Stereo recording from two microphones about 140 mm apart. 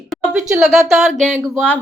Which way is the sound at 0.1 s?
5° right (ahead or behind).